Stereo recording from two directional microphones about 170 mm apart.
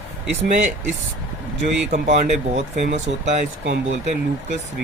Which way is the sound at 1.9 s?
45° right (ahead or behind).